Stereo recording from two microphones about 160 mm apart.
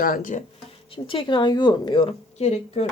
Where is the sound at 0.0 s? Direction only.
60° left (ahead or behind).